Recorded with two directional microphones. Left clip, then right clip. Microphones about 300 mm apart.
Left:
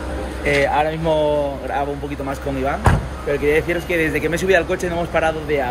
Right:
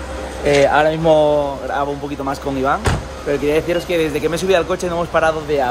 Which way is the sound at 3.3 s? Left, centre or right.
Centre.